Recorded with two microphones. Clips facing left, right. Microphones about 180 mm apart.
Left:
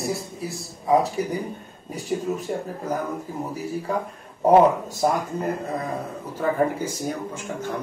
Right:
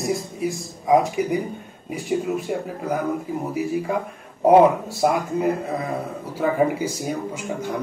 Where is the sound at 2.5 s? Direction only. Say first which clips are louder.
Right 2 dB; 10° right (ahead or behind).